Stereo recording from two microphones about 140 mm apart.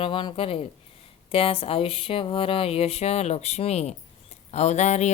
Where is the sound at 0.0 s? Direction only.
35° left (ahead or behind).